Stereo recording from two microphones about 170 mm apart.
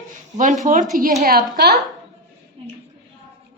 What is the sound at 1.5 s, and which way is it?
Speech, 75° right (ahead or behind).